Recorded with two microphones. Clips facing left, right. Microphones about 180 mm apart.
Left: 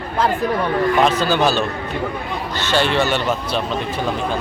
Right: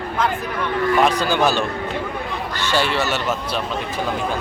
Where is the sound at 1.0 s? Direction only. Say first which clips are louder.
Left 1 dB; 10° right (ahead or behind).